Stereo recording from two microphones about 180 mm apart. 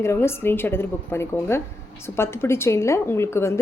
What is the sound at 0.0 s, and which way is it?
A woman's voice, 15° left (ahead or behind).